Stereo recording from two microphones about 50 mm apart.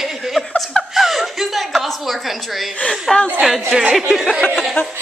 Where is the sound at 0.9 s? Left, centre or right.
Centre.